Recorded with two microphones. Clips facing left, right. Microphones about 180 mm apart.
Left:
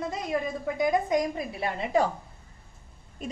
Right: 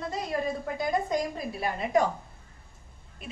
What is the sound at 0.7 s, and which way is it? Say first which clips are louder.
A woman's voice: left 5 dB; 20° left (ahead or behind).